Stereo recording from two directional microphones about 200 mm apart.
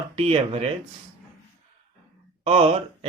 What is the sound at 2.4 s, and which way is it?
Speech, 30° right (ahead or behind).